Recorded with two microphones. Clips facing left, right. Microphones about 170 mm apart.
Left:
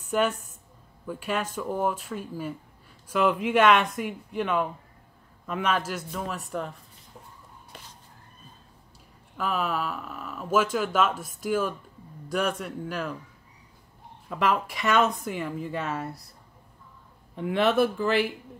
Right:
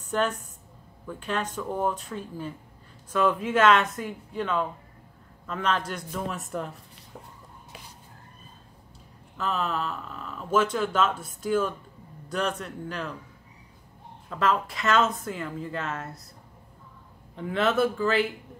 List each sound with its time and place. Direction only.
0.0 s a man's voice: 10° left (ahead or behind)
9.4 s speech: 10° left (ahead or behind)
14.3 s speech: 10° left (ahead or behind)
17.5 s speech: 10° left (ahead or behind)